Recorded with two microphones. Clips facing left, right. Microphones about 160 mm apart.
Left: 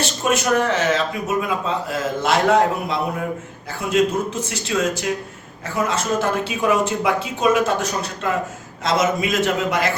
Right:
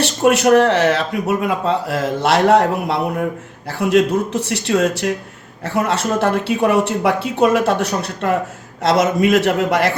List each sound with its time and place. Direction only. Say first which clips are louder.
0.0 s a man's voice: right 7 dB; 70° right (ahead or behind)